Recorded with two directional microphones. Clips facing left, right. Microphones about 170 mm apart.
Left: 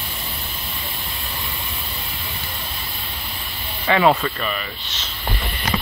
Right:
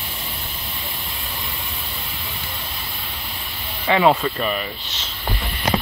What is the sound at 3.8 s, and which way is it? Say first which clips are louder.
Speech: even; 5° right (ahead or behind).